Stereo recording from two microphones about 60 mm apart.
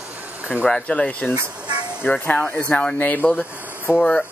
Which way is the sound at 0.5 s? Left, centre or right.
Centre.